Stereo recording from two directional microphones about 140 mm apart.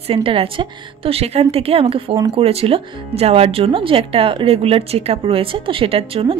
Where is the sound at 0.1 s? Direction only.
40° right (ahead or behind).